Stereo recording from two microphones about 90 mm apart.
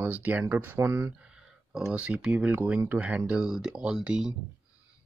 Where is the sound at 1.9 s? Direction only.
15° right (ahead or behind).